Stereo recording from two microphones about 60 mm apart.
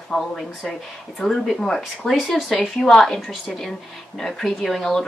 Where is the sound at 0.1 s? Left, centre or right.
Centre.